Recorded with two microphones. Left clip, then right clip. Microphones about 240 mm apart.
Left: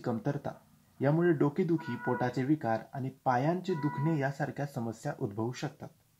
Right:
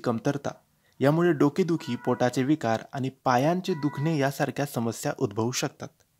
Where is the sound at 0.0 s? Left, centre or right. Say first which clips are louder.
Right 7 dB; right.